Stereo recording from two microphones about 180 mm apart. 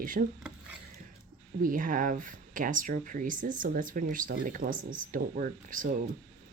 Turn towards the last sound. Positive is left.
turn(degrees=-50)  # may be behind; listen again after turning